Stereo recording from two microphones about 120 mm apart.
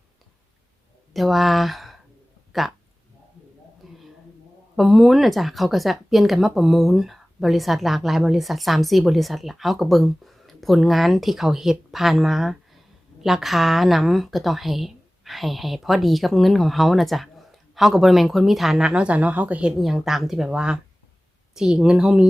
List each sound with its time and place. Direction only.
1.1 s speech: centre (ahead or behind)
3.8 s a sound: centre (ahead or behind)
4.8 s speech: centre (ahead or behind)
19.8 s speech: centre (ahead or behind)